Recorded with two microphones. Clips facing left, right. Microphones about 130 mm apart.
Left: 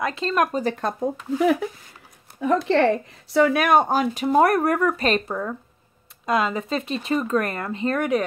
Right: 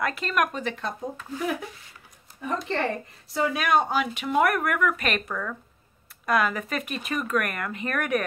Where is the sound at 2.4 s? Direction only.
90° left.